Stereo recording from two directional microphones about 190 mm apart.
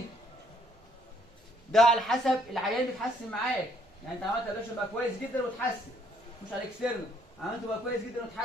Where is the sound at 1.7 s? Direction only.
Centre (ahead or behind).